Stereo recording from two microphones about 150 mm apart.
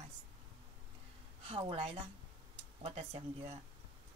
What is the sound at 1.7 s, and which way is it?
Speech, 45° right (ahead or behind).